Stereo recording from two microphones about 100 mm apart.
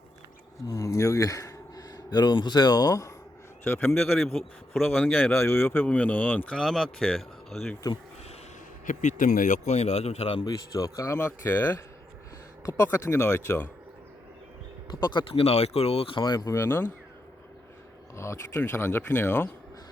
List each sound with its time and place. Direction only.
0.7 s speech: 35° left (ahead or behind)
3.6 s speech: 20° left (ahead or behind)
4.2 s speech: 5° left (ahead or behind)
4.8 s speech: 15° left (ahead or behind)
6.6 s speech: 5° left (ahead or behind)
7.9 s speech: 40° left (ahead or behind)
9.8 s a man's voice: 90° left
10.4 s speech: 35° left (ahead or behind)
11.3 s speech: 20° left (ahead or behind)
12.6 s speech: 30° left (ahead or behind)
14.8 s speech: 50° left (ahead or behind)
15.3 s speech: 85° left; by 16.5 s 45° left (ahead or behind)
16.5 s speech: 25° left (ahead or behind)
18.2 s speech: 30° left (ahead or behind)